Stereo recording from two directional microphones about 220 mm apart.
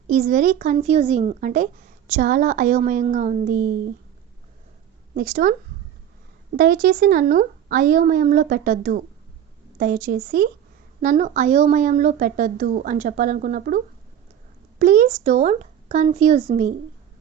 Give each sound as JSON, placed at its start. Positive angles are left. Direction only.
{"t": 0.1, "sound": "speech", "side_deg": -35}
{"t": 5.1, "sound": "speech", "side_deg": -35}
{"t": 6.6, "sound": "speech", "side_deg": -40}